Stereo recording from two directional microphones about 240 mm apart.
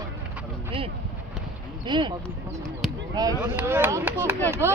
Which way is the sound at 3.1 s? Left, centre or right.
Centre.